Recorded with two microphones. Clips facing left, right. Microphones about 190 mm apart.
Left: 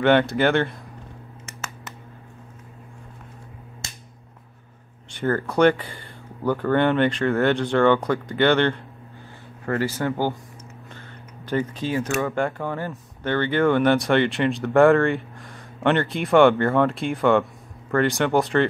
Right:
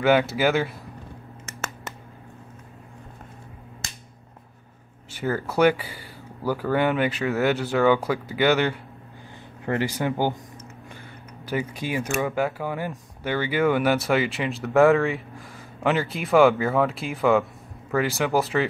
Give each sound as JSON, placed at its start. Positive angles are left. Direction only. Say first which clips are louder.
{"t": 0.0, "sound": "speech", "louder": "left 2 dB", "side_deg": -5}
{"t": 5.1, "sound": "speech", "louder": "left 3 dB", "side_deg": -5}